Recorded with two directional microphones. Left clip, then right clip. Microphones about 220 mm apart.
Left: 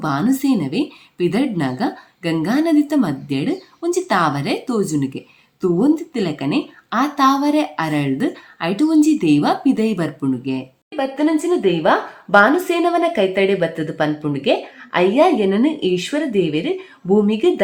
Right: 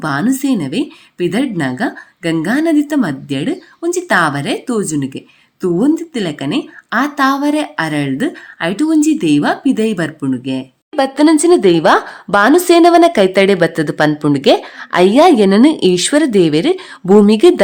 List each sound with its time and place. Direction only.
0.0 s speech: 25° right (ahead or behind)
10.9 s a woman's voice: 45° right (ahead or behind)